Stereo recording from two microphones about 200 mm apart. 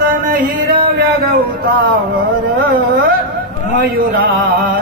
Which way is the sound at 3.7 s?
50° right (ahead or behind).